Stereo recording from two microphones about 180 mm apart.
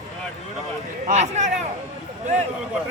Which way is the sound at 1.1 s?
40° right (ahead or behind).